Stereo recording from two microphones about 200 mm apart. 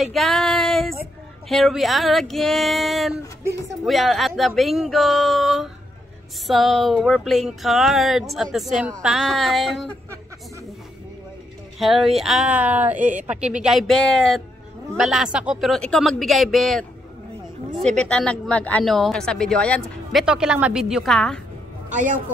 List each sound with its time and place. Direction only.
0.0 s female singing: centre (ahead or behind)
1.5 s a woman's voice: centre (ahead or behind)
11.8 s a woman's voice: centre (ahead or behind)
21.9 s a man's voice: 40° right (ahead or behind)